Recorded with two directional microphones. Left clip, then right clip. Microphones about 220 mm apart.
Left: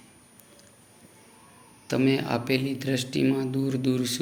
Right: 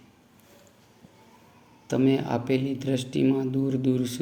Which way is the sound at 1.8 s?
15° right (ahead or behind).